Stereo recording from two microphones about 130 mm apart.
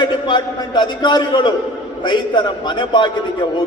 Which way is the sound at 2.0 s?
35° left (ahead or behind).